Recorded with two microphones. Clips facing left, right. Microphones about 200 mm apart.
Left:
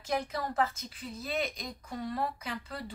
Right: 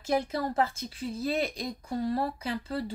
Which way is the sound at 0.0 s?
30° right (ahead or behind).